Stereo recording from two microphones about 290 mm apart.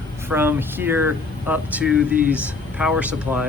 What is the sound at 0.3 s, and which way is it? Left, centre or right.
Speech, centre.